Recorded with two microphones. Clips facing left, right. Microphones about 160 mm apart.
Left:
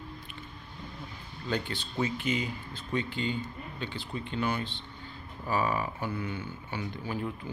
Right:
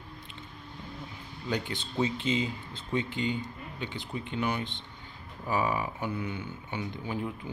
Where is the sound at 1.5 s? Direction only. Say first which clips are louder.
Even; 15° right (ahead or behind).